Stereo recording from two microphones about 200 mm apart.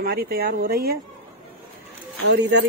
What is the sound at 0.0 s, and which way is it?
Speech, 50° right (ahead or behind).